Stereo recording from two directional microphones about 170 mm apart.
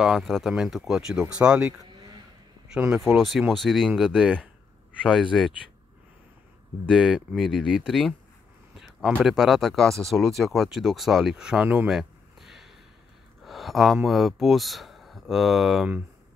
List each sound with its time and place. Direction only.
0.0 s speech: centre (ahead or behind)
1.8 s a sound: 25° right (ahead or behind)
2.9 s speech: centre (ahead or behind)
6.9 s speech: 5° right (ahead or behind)
9.1 s speech: centre (ahead or behind)